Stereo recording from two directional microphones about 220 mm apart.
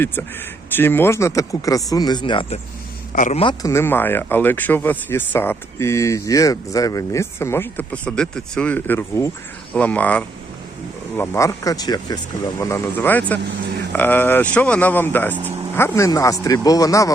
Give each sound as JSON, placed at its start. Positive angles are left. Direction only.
{"t": 0.7, "sound": "speech", "side_deg": 10}
{"t": 3.1, "sound": "a man's voice", "side_deg": 35}
{"t": 3.4, "sound": "speech", "side_deg": 15}